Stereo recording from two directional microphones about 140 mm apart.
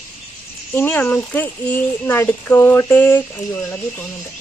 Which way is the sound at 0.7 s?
15° left (ahead or behind).